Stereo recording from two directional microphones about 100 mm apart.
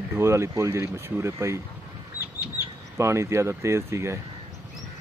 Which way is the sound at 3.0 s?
30° right (ahead or behind).